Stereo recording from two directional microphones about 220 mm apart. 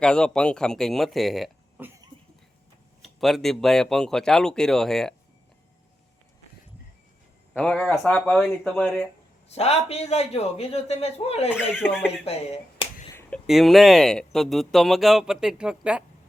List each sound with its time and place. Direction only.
0.0 s speech: 5° left (ahead or behind)
3.0 s speech: centre (ahead or behind)
7.5 s speech: 5° left (ahead or behind)
9.5 s a man's voice: 30° left (ahead or behind)
13.1 s speech: centre (ahead or behind)